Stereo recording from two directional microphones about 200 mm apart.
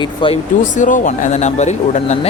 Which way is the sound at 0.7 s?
40° left (ahead or behind).